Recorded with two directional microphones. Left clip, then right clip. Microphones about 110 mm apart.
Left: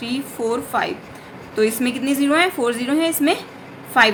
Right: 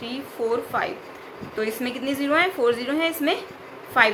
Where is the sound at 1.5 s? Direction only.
25° left (ahead or behind).